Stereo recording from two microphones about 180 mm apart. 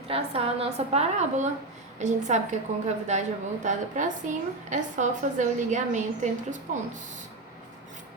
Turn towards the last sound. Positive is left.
turn(degrees=-45)  # may be behind; listen again after turning